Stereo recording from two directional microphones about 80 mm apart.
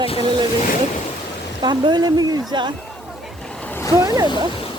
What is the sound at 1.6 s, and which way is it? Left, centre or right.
Speech, right.